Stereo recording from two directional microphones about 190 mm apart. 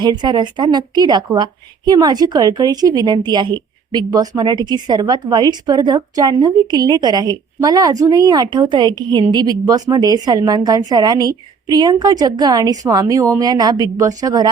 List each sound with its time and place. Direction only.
0.0 s a woman's voice: 25° right (ahead or behind)